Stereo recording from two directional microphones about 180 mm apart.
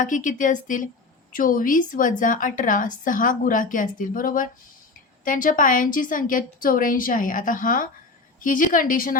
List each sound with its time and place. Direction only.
0.0 s a woman's voice: 45° left (ahead or behind)